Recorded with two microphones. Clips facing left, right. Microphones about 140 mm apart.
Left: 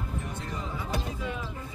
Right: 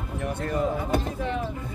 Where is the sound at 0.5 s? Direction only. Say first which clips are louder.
Right 9 dB; 55° right (ahead or behind).